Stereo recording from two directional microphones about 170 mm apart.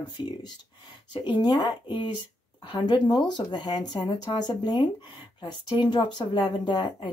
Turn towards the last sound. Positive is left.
turn(degrees=25)  # may be behind; listen again after turning